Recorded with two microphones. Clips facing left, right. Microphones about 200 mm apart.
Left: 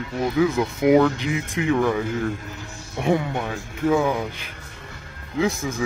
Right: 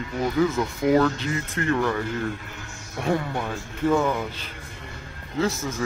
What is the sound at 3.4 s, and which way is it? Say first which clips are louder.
A man's voice: left 1 dB; 5° left (ahead or behind).